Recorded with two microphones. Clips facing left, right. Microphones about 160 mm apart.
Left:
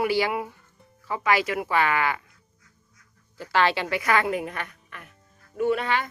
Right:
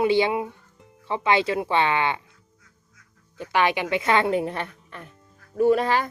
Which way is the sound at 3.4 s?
20° right (ahead or behind).